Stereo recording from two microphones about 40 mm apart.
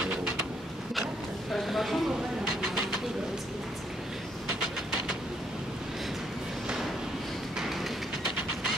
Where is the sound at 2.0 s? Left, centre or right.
Right.